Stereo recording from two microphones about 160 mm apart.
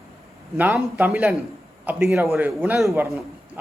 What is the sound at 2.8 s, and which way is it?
Speech, 15° right (ahead or behind).